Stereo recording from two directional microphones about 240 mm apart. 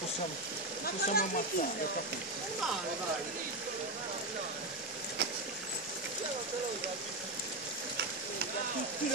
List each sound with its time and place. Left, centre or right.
0.8 s speech: left